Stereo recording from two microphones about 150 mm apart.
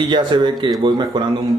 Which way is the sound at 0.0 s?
30° right (ahead or behind).